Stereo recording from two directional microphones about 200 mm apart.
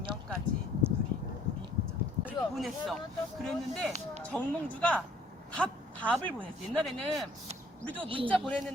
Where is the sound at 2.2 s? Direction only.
Centre (ahead or behind).